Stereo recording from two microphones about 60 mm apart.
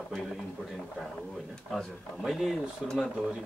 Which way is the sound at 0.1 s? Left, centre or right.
Centre.